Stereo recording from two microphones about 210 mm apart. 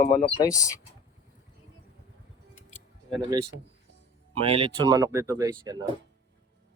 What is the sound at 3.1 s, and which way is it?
Speech, 20° right (ahead or behind).